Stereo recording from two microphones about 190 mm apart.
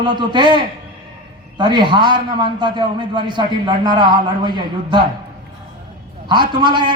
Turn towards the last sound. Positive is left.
turn(degrees=-25)  # may be behind; listen again after turning